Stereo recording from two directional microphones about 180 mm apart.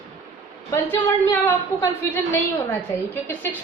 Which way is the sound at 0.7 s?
10° left (ahead or behind).